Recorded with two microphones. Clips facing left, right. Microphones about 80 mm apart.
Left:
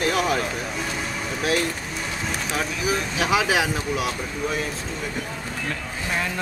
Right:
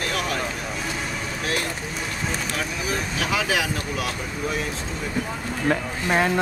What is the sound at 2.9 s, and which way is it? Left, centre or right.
Speech, centre.